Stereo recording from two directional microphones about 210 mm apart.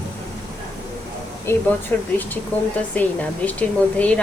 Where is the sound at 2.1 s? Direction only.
10° left (ahead or behind).